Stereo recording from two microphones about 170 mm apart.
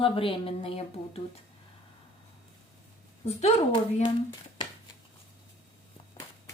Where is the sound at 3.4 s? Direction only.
40° left (ahead or behind).